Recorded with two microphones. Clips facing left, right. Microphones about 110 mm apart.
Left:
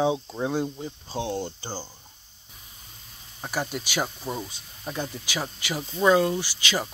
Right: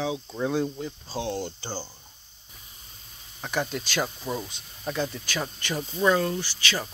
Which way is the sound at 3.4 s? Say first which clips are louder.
Right 1 dB; 5° left (ahead or behind).